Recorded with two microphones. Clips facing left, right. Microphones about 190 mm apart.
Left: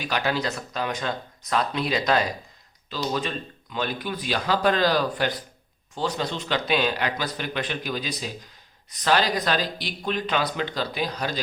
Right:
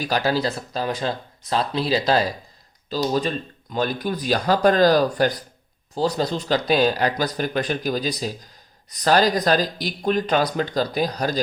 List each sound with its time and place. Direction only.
0.0 s speech: 35° right (ahead or behind)